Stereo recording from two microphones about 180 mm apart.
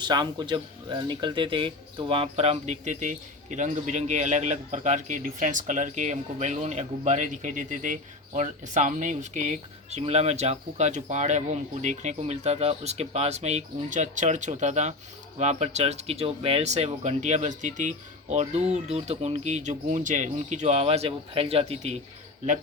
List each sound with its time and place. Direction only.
0.0 s speech: 25° right (ahead or behind)